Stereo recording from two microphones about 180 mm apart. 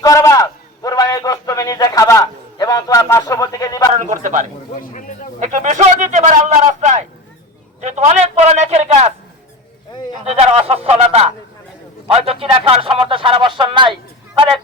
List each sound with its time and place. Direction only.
0.0 s a man's voice: 20° left (ahead or behind)
3.9 s a man's voice: 45° right (ahead or behind)
4.8 s speech: 45° left (ahead or behind)
5.4 s speech: 45° right (ahead or behind)
7.8 s a sound: 40° right (ahead or behind)
10.2 s a man's voice: 35° right (ahead or behind)